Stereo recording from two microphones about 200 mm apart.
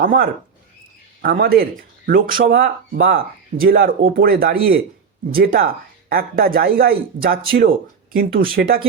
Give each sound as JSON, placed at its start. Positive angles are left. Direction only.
{"t": 0.0, "sound": "speech", "side_deg": -45}